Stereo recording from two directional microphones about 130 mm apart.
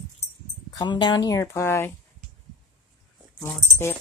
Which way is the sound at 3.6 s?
20° left (ahead or behind).